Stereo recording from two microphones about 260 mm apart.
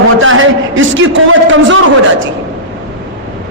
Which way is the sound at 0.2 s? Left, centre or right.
Right.